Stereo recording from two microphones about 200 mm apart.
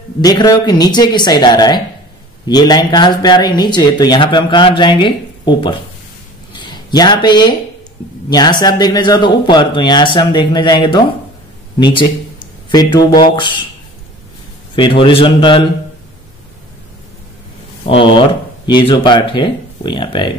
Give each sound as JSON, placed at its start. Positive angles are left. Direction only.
{"t": 0.2, "sound": "speech", "side_deg": 20}
{"t": 14.8, "sound": "speech", "side_deg": 25}
{"t": 17.8, "sound": "speech", "side_deg": 25}